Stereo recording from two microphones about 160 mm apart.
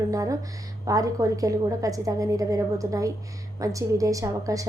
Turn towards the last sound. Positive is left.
turn(degrees=-20)  # may be behind; listen again after turning